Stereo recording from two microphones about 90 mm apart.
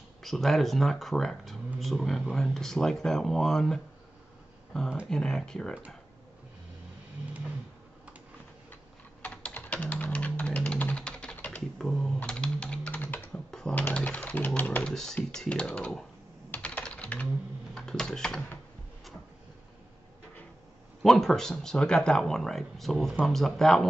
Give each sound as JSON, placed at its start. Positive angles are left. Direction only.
{"t": 0.2, "sound": "speech", "side_deg": 0}
{"t": 5.0, "sound": "speech", "side_deg": 5}
{"t": 9.2, "sound": "typing", "side_deg": 15}
{"t": 11.3, "sound": "computer keyboard", "side_deg": 15}
{"t": 12.3, "sound": "typing", "side_deg": 10}
{"t": 13.3, "sound": "typing", "side_deg": 5}
{"t": 13.7, "sound": "a sound", "side_deg": 15}
{"t": 14.6, "sound": "typing", "side_deg": 20}
{"t": 14.9, "sound": "speech", "side_deg": 5}
{"t": 16.4, "sound": "typing", "side_deg": 20}
{"t": 17.7, "sound": "a sound", "side_deg": 5}
{"t": 21.0, "sound": "speech", "side_deg": 0}